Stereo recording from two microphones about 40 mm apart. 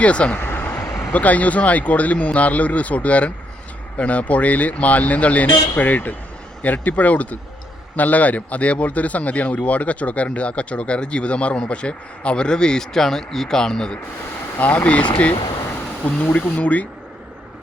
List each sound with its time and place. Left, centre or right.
0.0 s speech: left
0.3 s vehicle: left
1.1 s speech: left; by 12.8 s centre
12.8 s speech: centre
14.6 s speech: left
16.3 s speech: left